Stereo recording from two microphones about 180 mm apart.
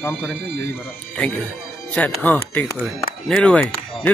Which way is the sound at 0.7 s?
5° left (ahead or behind).